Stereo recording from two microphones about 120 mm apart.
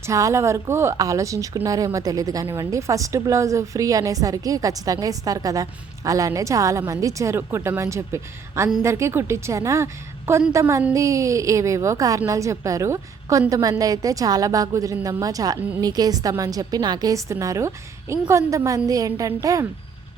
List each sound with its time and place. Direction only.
0.0 s speech: 25° right (ahead or behind)